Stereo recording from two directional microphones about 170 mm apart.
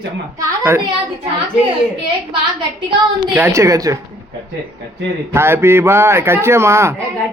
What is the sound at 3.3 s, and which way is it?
Music, 15° right (ahead or behind).